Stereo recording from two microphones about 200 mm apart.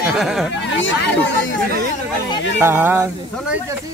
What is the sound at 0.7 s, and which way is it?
Speech, 65° left (ahead or behind).